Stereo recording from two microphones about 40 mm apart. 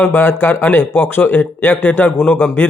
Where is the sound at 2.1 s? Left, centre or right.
Left.